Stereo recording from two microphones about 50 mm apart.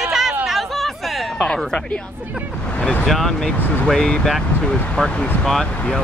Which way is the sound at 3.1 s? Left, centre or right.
Centre.